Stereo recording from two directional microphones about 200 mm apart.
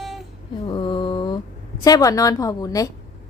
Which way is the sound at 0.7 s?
25° left (ahead or behind).